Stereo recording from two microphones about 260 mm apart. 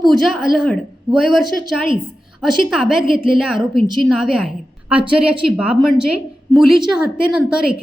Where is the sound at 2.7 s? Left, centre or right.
Centre.